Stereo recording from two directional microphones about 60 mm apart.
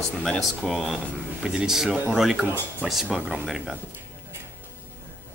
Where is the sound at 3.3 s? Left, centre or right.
Centre.